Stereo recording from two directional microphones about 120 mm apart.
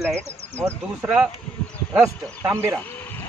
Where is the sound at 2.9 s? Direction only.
15° left (ahead or behind).